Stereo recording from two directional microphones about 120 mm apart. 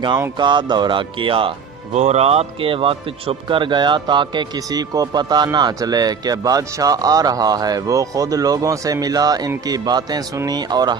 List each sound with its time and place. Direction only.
0.3 s speech: 40° right (ahead or behind)
1.9 s speech: 65° right (ahead or behind); by 10.9 s 35° right (ahead or behind)